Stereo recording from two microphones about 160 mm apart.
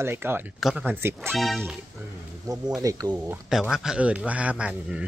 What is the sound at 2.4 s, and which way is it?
Speech, 20° right (ahead or behind).